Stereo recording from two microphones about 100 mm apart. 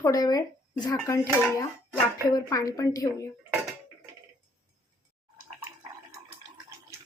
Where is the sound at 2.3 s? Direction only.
35° left (ahead or behind).